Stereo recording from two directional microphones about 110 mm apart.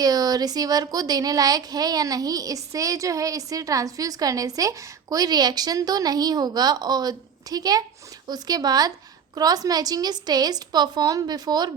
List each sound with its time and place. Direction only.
0.0 s a child's voice: 35° right (ahead or behind)